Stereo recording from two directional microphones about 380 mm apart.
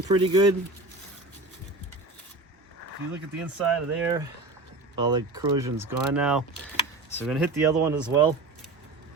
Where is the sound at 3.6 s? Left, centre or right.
Centre.